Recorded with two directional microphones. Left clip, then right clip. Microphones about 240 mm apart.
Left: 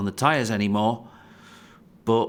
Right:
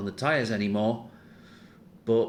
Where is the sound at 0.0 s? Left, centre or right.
Left.